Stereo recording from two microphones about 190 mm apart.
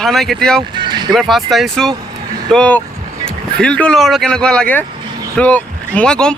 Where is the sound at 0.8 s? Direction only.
25° right (ahead or behind).